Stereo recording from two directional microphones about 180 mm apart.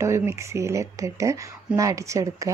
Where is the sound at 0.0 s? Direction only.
15° right (ahead or behind).